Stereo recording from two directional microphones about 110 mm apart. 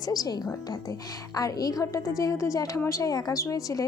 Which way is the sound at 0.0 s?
35° left (ahead or behind).